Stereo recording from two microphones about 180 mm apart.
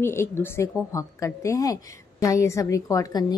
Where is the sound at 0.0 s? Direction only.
15° left (ahead or behind).